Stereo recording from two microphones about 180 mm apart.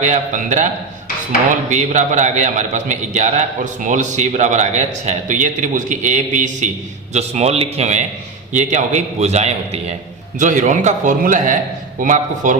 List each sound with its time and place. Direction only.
0.0 s a man's voice: 40° right (ahead or behind)
1.7 s a man's voice: 40° right (ahead or behind)